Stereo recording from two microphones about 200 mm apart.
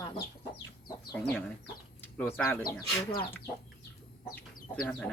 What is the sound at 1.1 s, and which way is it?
Speech, 5° left (ahead or behind).